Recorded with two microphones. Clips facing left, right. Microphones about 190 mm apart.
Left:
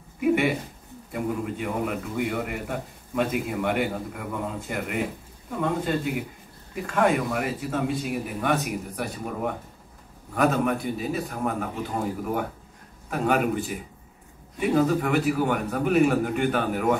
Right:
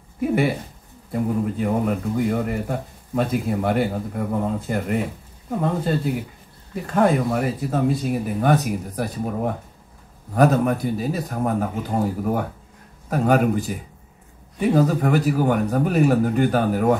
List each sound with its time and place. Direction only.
1.1 s a man's voice: 40° right (ahead or behind)
13.1 s a man's voice: 40° right (ahead or behind)